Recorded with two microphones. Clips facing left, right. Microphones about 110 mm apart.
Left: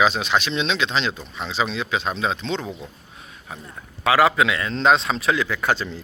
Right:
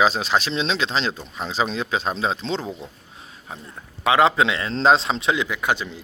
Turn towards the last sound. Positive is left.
turn(degrees=-15)  # may be behind; listen again after turning